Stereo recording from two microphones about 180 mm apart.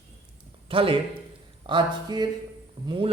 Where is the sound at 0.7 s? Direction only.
30° right (ahead or behind).